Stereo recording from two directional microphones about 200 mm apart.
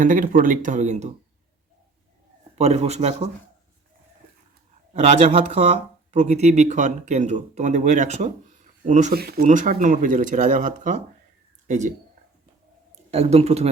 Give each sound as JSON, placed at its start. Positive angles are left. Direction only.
{"t": 0.0, "sound": "speech", "side_deg": -40}
{"t": 2.6, "sound": "speech", "side_deg": -35}
{"t": 4.9, "sound": "speech", "side_deg": -35}
{"t": 13.1, "sound": "speech", "side_deg": -30}